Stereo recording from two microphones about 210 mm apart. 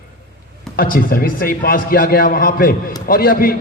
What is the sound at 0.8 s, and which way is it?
A man's voice, 40° left (ahead or behind).